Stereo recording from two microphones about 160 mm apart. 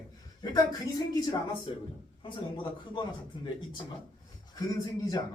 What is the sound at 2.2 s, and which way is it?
Speech, 30° left (ahead or behind).